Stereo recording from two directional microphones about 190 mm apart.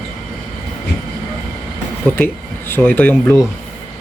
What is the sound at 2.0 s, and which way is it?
Speech, 10° left (ahead or behind).